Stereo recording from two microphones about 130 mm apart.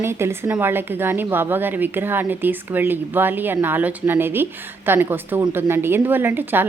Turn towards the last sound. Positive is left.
turn(degrees=-15)  # may be behind; listen again after turning